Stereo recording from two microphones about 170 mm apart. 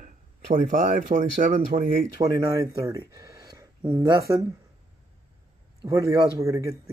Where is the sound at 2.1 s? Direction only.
20° right (ahead or behind).